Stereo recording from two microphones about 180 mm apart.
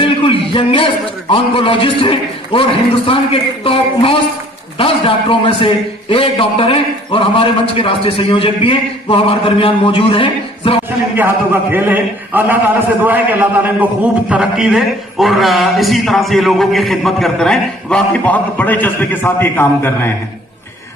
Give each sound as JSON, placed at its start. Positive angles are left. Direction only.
{"t": 0.0, "sound": "a man's voice", "side_deg": 30}
{"t": 11.7, "sound": "a man's voice", "side_deg": -10}